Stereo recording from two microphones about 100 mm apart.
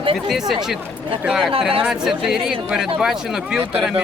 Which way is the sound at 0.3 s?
5° right (ahead or behind).